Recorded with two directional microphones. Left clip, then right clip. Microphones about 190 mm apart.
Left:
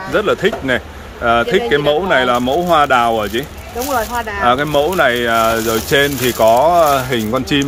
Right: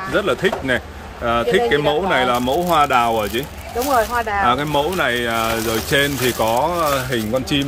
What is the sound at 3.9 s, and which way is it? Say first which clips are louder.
Speech: right 1 dB; 30° right (ahead or behind).